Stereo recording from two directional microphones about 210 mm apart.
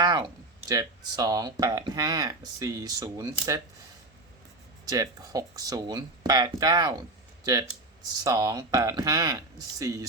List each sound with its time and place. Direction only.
0.0 s a sound: 20° right (ahead or behind)
0.7 s speech: 15° right (ahead or behind)
4.9 s speech: 15° right (ahead or behind)
8.2 s speech: 15° right (ahead or behind)